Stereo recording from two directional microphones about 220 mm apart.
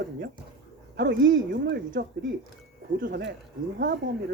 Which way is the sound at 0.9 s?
55° right (ahead or behind).